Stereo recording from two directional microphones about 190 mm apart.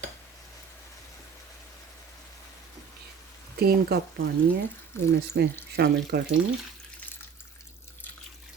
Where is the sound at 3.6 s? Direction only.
55° right (ahead or behind).